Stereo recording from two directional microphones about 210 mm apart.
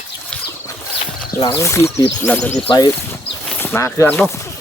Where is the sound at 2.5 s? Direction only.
25° left (ahead or behind).